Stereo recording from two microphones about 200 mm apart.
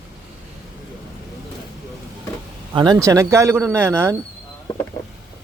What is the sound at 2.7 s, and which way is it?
Speech, 20° right (ahead or behind).